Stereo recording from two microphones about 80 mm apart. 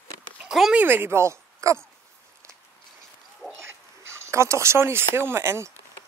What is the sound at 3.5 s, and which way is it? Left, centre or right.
Speech, right.